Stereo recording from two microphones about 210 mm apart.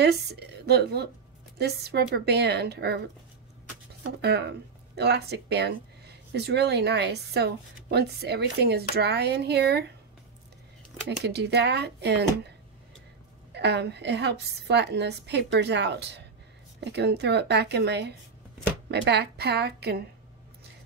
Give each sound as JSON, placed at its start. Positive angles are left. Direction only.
{"t": 0.0, "sound": "a woman's voice", "side_deg": -50}
{"t": 4.2, "sound": "speech", "side_deg": -50}
{"t": 11.2, "sound": "speech", "side_deg": -50}